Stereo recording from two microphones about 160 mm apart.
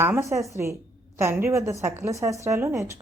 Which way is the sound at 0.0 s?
15° right (ahead or behind).